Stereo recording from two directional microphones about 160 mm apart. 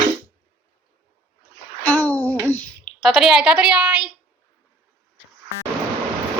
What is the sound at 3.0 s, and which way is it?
A woman's voice, centre (ahead or behind).